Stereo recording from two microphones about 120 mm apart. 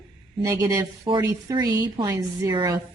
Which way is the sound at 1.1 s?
40° right (ahead or behind).